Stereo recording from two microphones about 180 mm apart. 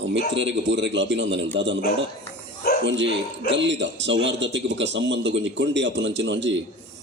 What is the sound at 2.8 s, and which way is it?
Speech, 85° right.